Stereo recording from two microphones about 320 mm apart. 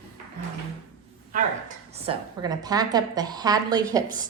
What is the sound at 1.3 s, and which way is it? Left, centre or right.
A woman's voice, right.